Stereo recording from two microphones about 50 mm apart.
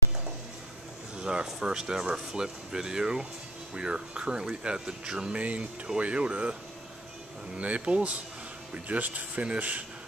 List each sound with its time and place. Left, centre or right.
1.2 s speech: centre
7.5 s speech: right